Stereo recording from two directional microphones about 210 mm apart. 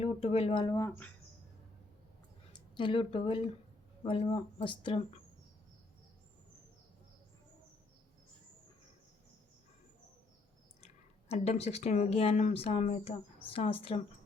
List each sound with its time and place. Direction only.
0.0 s speech: 30° left (ahead or behind); by 1.1 s 10° left (ahead or behind)
2.5 s speech: 20° left (ahead or behind)
11.3 s speech: 30° left (ahead or behind)